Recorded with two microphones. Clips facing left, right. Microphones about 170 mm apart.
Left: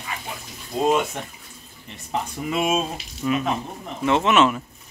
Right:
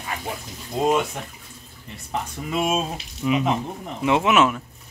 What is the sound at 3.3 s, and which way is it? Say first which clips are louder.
Speech: right 2 dB; 15° right (ahead or behind).